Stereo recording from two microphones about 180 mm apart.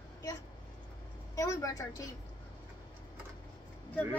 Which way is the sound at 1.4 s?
20° left (ahead or behind).